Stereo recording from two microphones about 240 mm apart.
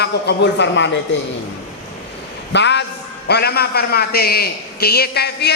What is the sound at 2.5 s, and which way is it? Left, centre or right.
A man's voice, left.